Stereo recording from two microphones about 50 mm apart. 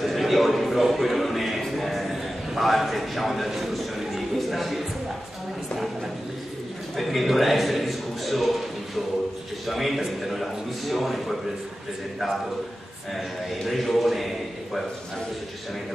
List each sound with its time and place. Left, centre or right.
0.0 s a man's voice: centre
7.0 s a sound: centre
9.7 s a man's voice: centre
13.7 s a man's voice: centre